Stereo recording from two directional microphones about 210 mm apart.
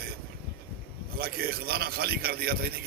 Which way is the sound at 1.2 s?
45° right (ahead or behind).